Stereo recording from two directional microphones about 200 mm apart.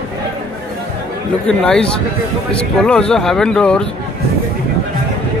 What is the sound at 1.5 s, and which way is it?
Speech, 5° left (ahead or behind).